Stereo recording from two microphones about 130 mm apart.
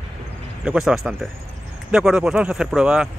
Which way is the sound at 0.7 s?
5° right (ahead or behind).